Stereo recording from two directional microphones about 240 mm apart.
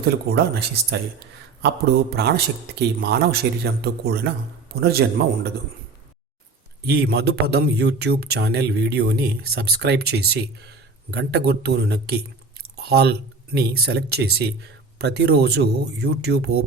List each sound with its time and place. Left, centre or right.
0.0 s speech: right
2.1 s speech: right
6.8 s speech: right